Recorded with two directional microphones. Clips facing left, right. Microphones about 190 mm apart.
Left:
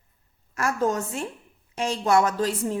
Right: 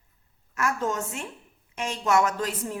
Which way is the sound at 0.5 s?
35° left (ahead or behind).